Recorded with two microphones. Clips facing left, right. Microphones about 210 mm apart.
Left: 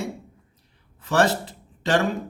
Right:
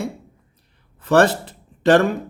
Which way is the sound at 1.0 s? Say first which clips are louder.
Right 5 dB; 55° right (ahead or behind).